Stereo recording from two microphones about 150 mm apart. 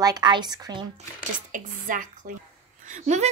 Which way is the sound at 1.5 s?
65° right (ahead or behind).